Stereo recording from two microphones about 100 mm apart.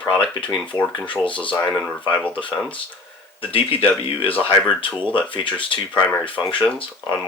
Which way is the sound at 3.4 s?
65° left (ahead or behind).